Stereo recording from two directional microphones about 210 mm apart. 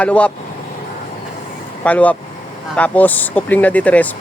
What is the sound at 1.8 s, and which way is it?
Speech, 5° left (ahead or behind).